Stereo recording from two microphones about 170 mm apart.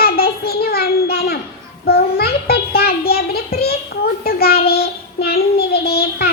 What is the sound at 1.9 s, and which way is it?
Child singing, 65° left (ahead or behind).